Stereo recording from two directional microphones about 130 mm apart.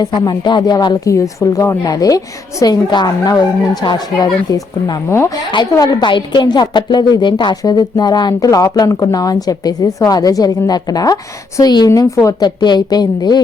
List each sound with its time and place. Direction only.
0.0 s a woman's voice: 30° left (ahead or behind)
5.0 s a woman's voice: 20° left (ahead or behind)
5.7 s a woman's voice: 30° left (ahead or behind)